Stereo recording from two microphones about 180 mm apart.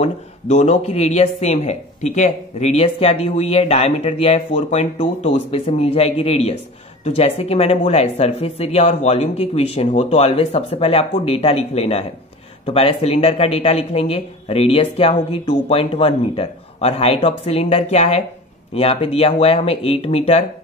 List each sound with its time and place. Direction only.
0.0 s speech: 35° left (ahead or behind)